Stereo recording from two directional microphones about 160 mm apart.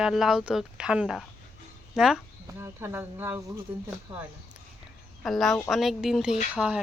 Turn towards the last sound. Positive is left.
turn(degrees=-5)  # may be behind; listen again after turning